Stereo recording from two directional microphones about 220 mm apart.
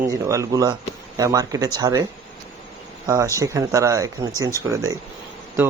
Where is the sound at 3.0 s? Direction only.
15° right (ahead or behind).